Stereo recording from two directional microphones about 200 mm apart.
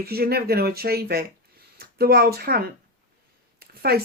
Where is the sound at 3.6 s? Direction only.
50° right (ahead or behind).